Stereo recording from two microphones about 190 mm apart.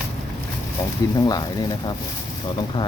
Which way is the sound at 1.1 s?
20° left (ahead or behind).